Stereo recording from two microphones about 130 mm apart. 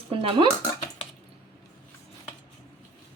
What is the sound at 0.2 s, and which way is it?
Speech, 40° right (ahead or behind).